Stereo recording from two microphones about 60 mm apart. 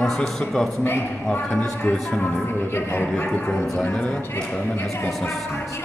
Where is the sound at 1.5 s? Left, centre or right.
Centre.